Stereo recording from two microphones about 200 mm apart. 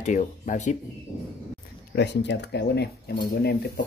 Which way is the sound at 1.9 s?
60° left (ahead or behind).